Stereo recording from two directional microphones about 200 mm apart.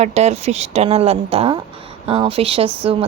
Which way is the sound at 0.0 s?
35° right (ahead or behind).